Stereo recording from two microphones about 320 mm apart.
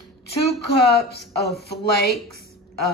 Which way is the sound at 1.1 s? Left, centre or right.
Left.